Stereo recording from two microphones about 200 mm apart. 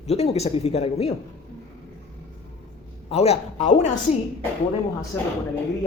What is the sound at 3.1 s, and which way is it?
Speech, 30° left (ahead or behind).